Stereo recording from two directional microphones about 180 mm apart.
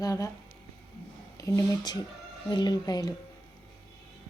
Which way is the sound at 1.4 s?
20° left (ahead or behind).